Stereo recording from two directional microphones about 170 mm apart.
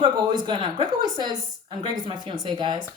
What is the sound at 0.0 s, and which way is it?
Speech, 25° right (ahead or behind).